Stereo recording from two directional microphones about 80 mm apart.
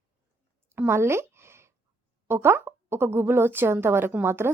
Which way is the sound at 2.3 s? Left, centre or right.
Right.